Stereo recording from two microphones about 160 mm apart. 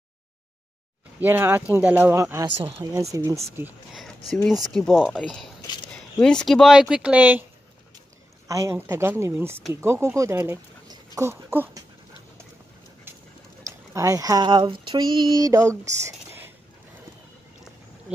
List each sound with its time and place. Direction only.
1.2 s speech: 15° right (ahead or behind)
4.5 s speech: centre (ahead or behind)
8.5 s speech: 15° right (ahead or behind)
13.9 s speech: 20° right (ahead or behind)